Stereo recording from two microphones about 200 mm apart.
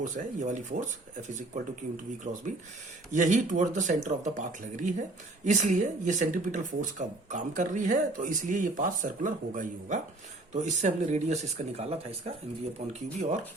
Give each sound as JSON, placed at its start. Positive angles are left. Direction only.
{"t": 0.0, "sound": "speech", "side_deg": -40}